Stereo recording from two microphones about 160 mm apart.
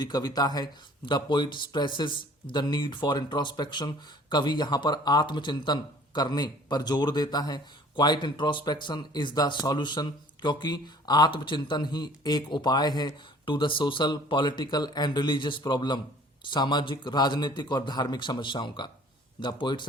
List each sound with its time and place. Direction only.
0.0 s speech: 25° left (ahead or behind)